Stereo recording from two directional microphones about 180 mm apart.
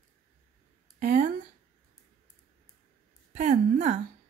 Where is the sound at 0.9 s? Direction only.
50° right (ahead or behind).